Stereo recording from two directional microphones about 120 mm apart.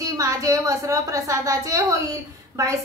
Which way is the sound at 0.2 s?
30° right (ahead or behind).